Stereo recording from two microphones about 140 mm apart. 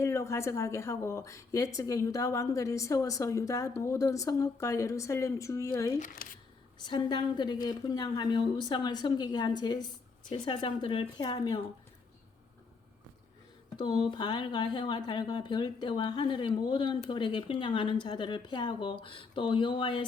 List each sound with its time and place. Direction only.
0.0 s a woman's voice: 20° left (ahead or behind)
6.2 s speech: 90° left
6.7 s speech: 30° left (ahead or behind)
13.7 s speech: 35° left (ahead or behind)